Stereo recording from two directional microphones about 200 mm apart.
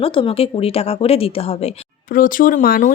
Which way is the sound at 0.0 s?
30° left (ahead or behind).